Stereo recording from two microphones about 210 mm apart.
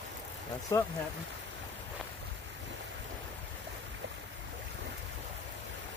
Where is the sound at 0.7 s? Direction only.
15° left (ahead or behind).